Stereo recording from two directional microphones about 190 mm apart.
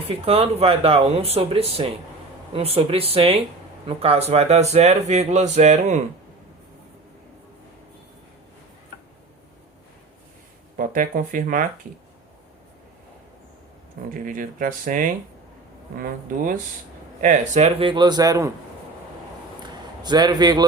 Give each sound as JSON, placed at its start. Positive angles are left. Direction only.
{"t": 0.1, "sound": "speech", "side_deg": -30}
{"t": 10.8, "sound": "speech", "side_deg": -45}
{"t": 14.1, "sound": "a man's voice", "side_deg": -45}
{"t": 20.0, "sound": "a man's voice", "side_deg": -20}